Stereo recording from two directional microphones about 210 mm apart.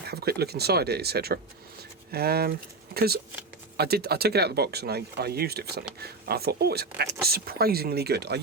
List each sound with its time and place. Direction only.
0.1 s speech: 50° right (ahead or behind)